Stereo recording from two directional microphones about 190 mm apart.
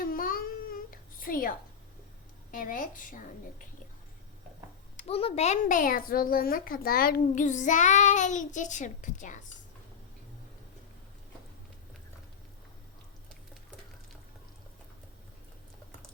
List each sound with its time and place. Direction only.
0.0 s a sound: 50° left (ahead or behind)
1.2 s a woman's voice: 50° left (ahead or behind)
4.9 s a woman's voice: 30° left (ahead or behind)